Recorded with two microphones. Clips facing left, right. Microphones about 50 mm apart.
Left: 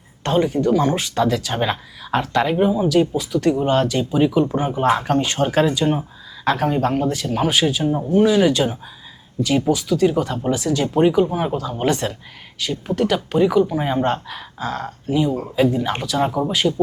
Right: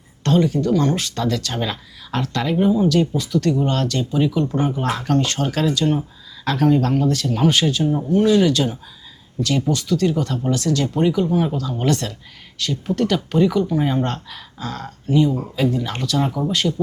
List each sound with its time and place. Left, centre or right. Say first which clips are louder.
0.2 s speech: even; left